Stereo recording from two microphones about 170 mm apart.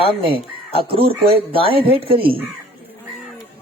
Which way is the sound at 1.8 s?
30° right (ahead or behind).